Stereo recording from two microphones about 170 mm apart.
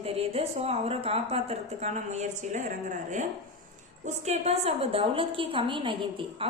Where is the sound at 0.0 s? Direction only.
35° right (ahead or behind).